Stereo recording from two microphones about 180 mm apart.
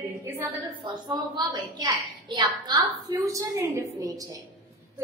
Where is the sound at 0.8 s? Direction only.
25° right (ahead or behind).